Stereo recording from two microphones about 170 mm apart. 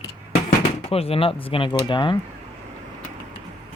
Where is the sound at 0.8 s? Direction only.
35° left (ahead or behind).